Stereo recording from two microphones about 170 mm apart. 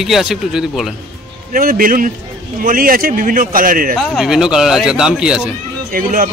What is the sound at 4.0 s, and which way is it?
Speech, centre (ahead or behind).